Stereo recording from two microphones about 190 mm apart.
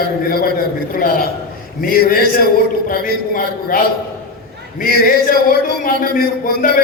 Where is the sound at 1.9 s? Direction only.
50° left (ahead or behind).